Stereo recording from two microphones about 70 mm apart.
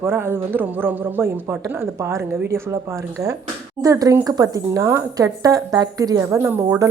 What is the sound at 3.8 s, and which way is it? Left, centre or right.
Speech, right.